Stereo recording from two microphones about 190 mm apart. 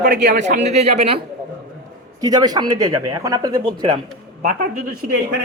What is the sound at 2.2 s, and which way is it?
Speech, 20° right (ahead or behind).